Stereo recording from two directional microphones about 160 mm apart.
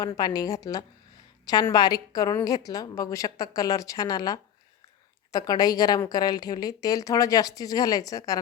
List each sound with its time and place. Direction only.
0.0 s a woman's voice: 25° left (ahead or behind)